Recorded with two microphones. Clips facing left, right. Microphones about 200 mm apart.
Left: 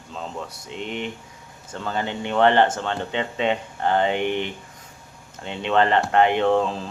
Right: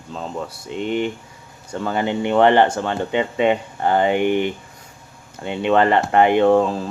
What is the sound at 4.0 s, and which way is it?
Speech, 55° right (ahead or behind).